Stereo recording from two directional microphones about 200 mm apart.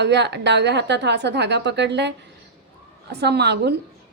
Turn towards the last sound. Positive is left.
turn(degrees=-55)  # may be behind; listen again after turning